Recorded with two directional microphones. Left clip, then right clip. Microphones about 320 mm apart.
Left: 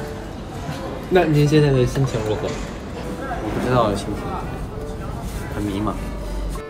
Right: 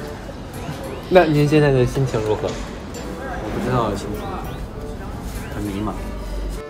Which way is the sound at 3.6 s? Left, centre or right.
Centre.